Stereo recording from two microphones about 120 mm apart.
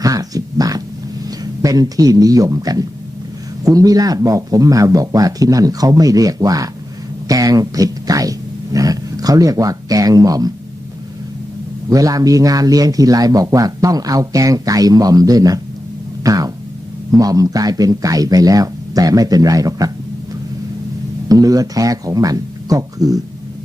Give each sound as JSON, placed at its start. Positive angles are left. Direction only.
{"t": 0.0, "sound": "a sound", "side_deg": -30}
{"t": 1.4, "sound": "speech", "side_deg": -30}
{"t": 11.9, "sound": "speech", "side_deg": -30}
{"t": 21.3, "sound": "speech", "side_deg": -30}